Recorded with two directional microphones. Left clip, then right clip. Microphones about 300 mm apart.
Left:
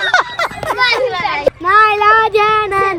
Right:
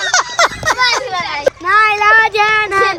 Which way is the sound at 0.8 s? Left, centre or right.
Right.